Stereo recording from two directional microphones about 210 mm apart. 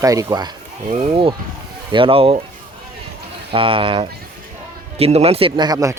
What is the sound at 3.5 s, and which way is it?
Speech, 25° right (ahead or behind).